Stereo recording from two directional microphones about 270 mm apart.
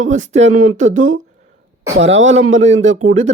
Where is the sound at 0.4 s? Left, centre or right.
Right.